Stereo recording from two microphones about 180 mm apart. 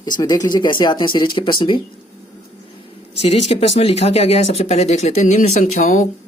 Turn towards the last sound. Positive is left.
turn(degrees=40)  # may be behind; listen again after turning